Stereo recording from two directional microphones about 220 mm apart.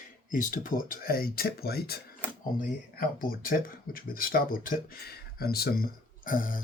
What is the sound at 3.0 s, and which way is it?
Speech, 40° left (ahead or behind).